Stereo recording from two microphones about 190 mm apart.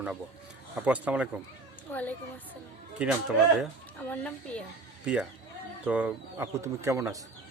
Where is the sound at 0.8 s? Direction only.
5° right (ahead or behind).